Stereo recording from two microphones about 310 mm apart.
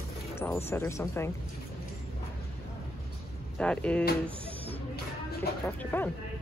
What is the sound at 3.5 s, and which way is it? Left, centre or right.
Speech, centre.